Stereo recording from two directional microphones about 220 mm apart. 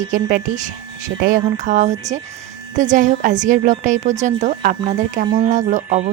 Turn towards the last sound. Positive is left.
turn(degrees=-35)  # may be behind; listen again after turning